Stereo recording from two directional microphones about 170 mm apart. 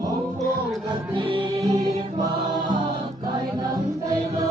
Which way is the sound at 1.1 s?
30° right (ahead or behind).